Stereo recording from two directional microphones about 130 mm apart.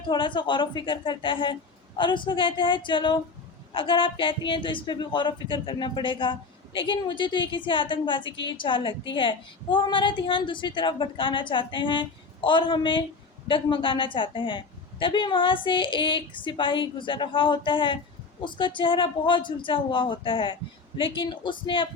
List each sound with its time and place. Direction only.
0.1 s a woman's voice: 40° left (ahead or behind)